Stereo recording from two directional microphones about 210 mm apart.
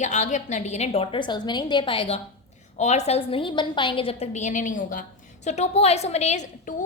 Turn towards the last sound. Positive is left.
turn(degrees=35)  # may be behind; listen again after turning